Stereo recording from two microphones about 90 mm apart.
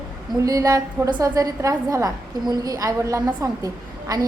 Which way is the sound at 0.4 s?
40° right (ahead or behind).